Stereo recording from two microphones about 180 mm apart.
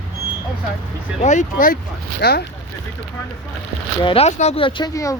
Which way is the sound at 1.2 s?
45° left (ahead or behind).